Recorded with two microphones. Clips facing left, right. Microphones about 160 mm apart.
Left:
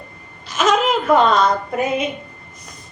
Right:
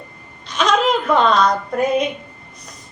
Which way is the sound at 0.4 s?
5° left (ahead or behind).